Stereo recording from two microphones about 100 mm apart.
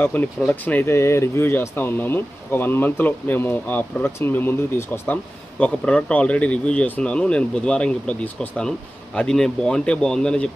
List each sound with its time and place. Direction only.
0.0 s speech: 20° left (ahead or behind)